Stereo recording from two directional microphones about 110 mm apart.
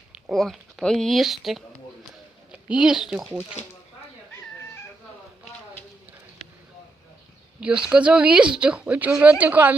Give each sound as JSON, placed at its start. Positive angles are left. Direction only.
{"t": 0.1, "sound": "speech", "side_deg": 0}
{"t": 7.6, "sound": "speech", "side_deg": -10}